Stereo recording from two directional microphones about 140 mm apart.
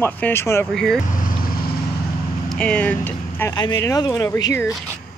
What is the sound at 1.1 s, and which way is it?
Vehicle, 80° left.